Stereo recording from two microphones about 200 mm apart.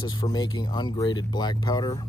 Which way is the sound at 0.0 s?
20° left (ahead or behind).